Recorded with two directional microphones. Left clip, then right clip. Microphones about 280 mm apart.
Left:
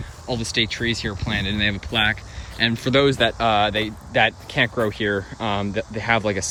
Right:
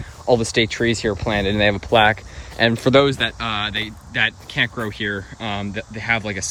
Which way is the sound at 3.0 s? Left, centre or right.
Centre.